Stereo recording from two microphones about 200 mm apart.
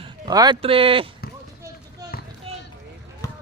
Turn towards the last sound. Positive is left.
turn(degrees=15)  # may be behind; listen again after turning